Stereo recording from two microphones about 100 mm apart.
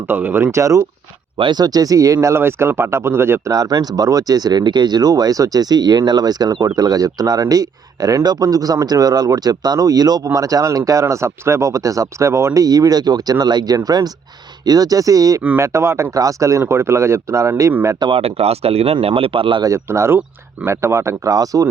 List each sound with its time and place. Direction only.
0.1 s speech: 20° right (ahead or behind)
1.4 s speech: 45° right (ahead or behind)
2.2 s speech: 25° right (ahead or behind)
12.6 s speech: 40° right (ahead or behind)
18.2 s speech: 90° right; by 19.6 s 55° right (ahead or behind)
19.6 s speech: 30° right (ahead or behind)